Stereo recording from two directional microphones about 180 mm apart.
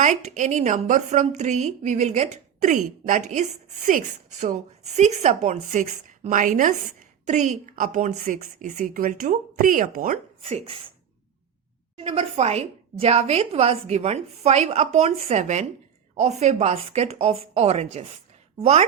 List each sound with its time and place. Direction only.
0.0 s a woman's voice: 45° right (ahead or behind)
10.4 s a woman's voice: 35° right (ahead or behind)
11.9 s a woman's voice: 35° right (ahead or behind)